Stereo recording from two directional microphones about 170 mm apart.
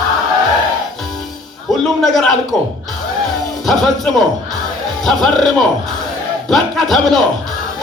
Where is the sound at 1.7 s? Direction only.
Centre (ahead or behind).